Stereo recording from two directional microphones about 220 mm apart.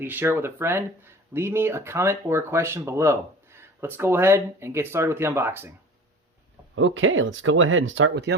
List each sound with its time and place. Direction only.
0.0 s speech: 10° right (ahead or behind)
6.7 s speech: 65° right (ahead or behind)